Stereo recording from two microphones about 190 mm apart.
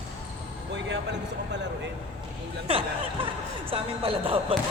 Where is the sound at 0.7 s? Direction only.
70° right (ahead or behind).